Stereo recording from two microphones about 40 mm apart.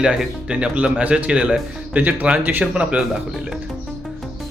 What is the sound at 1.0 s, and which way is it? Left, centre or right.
Speech, right.